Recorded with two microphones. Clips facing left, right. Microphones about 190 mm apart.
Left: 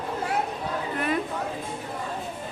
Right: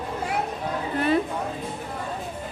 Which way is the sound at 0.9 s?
30° right (ahead or behind).